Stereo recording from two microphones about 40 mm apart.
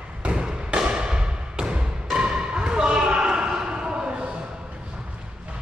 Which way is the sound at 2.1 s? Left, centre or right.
Right.